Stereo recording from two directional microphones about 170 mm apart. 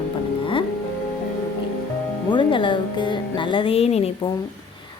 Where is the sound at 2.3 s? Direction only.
30° left (ahead or behind).